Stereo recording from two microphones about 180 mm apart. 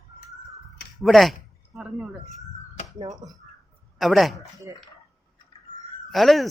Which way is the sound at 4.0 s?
Centre (ahead or behind).